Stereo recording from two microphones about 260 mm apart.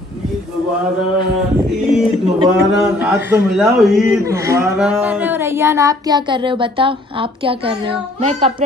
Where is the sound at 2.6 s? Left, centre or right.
Centre.